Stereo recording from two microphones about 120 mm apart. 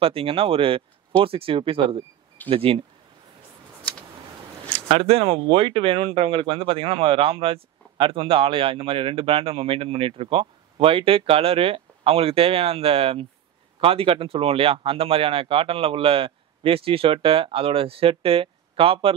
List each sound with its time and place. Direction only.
0.0 s speech: 50° right (ahead or behind)
4.8 s speech: 50° right (ahead or behind)